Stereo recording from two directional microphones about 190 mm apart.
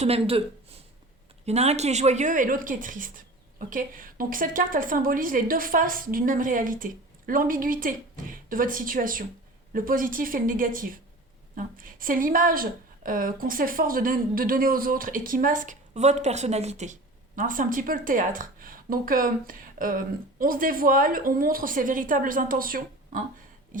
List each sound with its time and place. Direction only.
0.0 s speech: 30° right (ahead or behind)
1.5 s speech: 35° right (ahead or behind)